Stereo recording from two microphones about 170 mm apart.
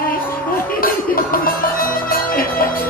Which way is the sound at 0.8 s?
55° left (ahead or behind).